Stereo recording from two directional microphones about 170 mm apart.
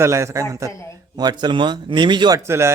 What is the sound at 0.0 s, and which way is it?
Speech, 15° right (ahead or behind).